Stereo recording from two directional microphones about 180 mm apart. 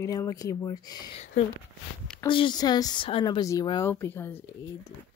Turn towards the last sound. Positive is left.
turn(degrees=15)  # may be behind; listen again after turning